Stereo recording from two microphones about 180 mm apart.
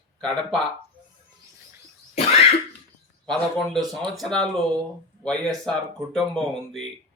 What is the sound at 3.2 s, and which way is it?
Speech, 5° left (ahead or behind).